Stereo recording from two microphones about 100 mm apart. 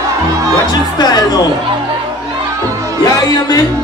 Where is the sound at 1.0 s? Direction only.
45° left (ahead or behind).